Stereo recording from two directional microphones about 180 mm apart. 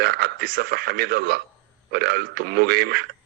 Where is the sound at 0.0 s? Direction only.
60° right (ahead or behind).